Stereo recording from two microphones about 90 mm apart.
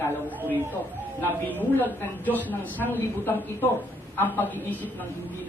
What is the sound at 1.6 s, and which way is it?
A woman's voice, 20° left (ahead or behind).